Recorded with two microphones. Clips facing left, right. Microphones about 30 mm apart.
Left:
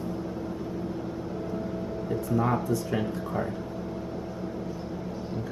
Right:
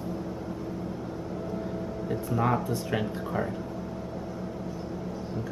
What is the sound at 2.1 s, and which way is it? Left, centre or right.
Speech, centre.